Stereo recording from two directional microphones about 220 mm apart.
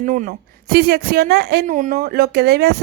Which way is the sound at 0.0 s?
35° right (ahead or behind).